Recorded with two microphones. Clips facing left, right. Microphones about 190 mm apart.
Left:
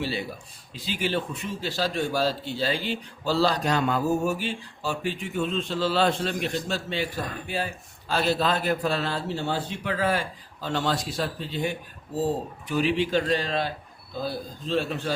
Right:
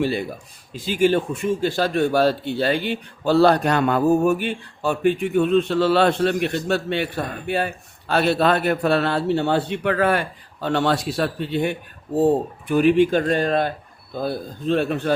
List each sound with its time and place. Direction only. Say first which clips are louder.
0.0 s a man's voice: right 7 dB; 50° right (ahead or behind)